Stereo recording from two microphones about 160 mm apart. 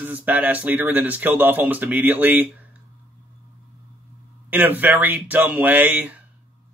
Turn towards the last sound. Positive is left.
turn(degrees=-10)  # may be behind; listen again after turning